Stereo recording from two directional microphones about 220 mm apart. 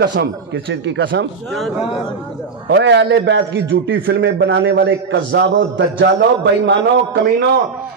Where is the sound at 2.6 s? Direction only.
50° right (ahead or behind).